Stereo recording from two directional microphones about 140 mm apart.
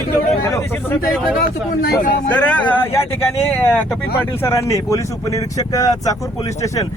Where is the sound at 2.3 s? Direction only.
10° left (ahead or behind); by 6.1 s 25° left (ahead or behind).